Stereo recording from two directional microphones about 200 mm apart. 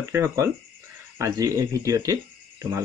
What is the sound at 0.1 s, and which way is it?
Speech, 15° right (ahead or behind).